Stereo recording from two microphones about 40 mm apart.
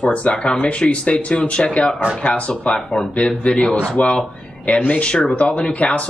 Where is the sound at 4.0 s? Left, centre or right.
Left.